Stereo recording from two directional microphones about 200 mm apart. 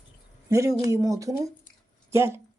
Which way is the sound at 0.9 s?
15° right (ahead or behind).